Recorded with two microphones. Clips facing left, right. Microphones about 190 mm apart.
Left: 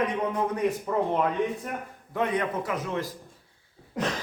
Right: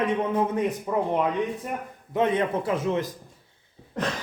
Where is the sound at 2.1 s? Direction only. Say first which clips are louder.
Right 4 dB; 25° right (ahead or behind).